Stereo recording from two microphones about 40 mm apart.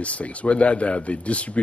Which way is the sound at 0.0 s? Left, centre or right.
Left.